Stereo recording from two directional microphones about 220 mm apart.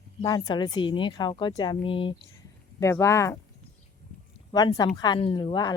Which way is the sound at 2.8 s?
15° left (ahead or behind).